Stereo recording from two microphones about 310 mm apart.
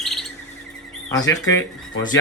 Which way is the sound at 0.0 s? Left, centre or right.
Centre.